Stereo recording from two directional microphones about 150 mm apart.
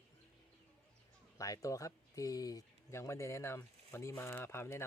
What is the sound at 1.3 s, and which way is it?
Speech, 20° left (ahead or behind).